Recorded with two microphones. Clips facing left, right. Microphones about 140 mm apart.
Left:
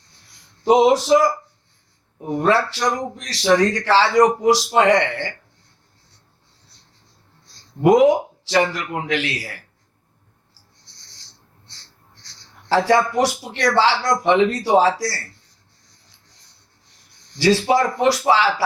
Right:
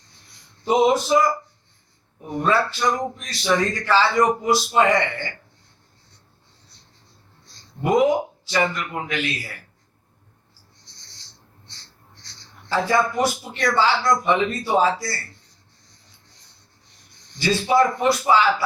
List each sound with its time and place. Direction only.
0.6 s a man's voice: 85° left
7.8 s a man's voice: 85° left
12.6 s a man's voice: 80° left
17.3 s speech: 90° left